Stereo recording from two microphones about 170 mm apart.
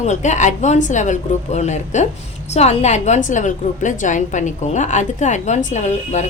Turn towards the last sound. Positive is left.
turn(degrees=45)  # may be behind; listen again after turning